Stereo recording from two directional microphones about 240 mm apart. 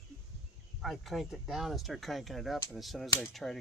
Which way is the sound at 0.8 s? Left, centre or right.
Centre.